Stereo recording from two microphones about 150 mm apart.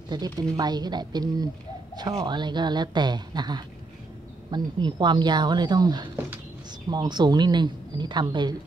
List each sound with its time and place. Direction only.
0.1 s a woman's voice: 25° right (ahead or behind)